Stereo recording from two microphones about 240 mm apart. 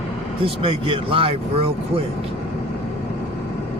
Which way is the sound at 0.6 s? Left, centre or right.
Right.